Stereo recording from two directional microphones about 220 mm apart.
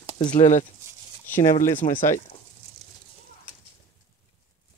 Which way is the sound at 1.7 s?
35° left (ahead or behind).